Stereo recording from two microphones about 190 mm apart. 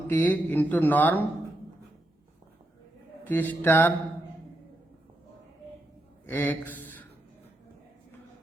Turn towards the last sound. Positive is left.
turn(degrees=10)  # may be behind; listen again after turning